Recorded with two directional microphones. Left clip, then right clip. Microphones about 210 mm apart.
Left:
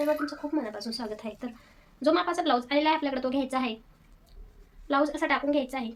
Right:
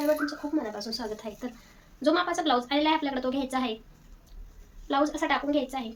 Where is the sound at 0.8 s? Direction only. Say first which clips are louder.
Right 1 dB; 25° left (ahead or behind).